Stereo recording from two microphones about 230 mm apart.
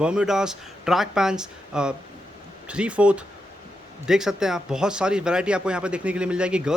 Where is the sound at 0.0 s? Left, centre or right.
Centre.